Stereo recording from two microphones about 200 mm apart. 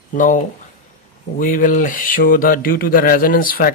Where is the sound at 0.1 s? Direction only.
40° left (ahead or behind).